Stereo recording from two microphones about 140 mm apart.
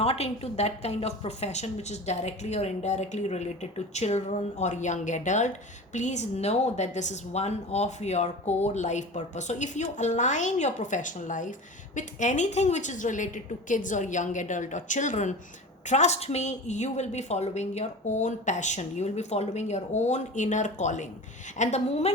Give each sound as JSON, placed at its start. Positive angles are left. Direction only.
{"t": 0.0, "sound": "a woman's voice", "side_deg": 45}